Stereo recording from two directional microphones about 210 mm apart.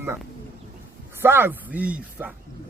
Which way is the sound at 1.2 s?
10° right (ahead or behind).